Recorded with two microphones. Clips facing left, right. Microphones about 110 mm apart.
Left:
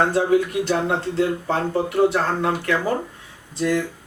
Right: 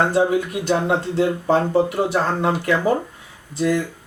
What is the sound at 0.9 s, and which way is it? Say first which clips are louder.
Speech: right 2 dB; centre (ahead or behind).